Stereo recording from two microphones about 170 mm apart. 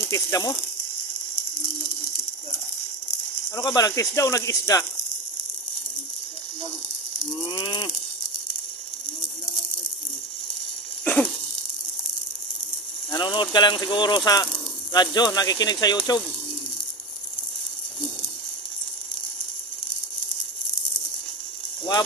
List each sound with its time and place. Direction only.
0.1 s speech: 15° left (ahead or behind)
3.5 s speech: 15° left (ahead or behind)
7.5 s speech: 30° left (ahead or behind)
11.0 s a sound: 10° left (ahead or behind)
13.1 s speech: 25° left (ahead or behind)